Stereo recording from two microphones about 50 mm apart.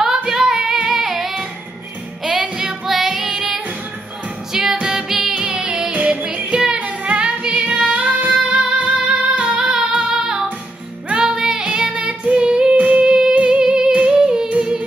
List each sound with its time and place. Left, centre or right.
0.0 s female singing: centre
2.2 s music: centre
2.6 s music: centre; by 8.9 s right
9.3 s female singing: right
9.6 s female singing: centre
10.1 s music: centre
11.6 s female singing: centre
12.7 s music: right
13.0 s music: centre
14.0 s yodeling: centre